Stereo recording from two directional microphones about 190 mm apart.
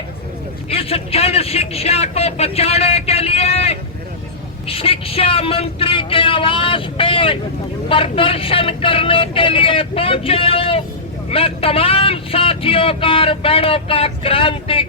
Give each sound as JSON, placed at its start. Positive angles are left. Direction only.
{"t": 0.7, "sound": "speech", "side_deg": 30}